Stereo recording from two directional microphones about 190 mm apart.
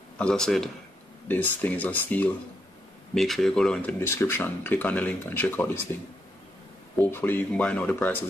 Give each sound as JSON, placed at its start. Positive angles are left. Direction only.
{"t": 0.2, "sound": "a man's voice", "side_deg": 5}
{"t": 7.0, "sound": "speech", "side_deg": 10}